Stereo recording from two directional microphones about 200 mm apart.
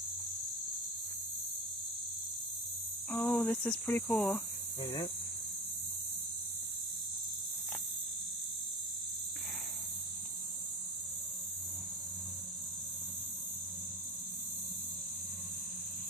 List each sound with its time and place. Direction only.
3.1 s speech: 10° left (ahead or behind)
4.8 s speech: 20° left (ahead or behind)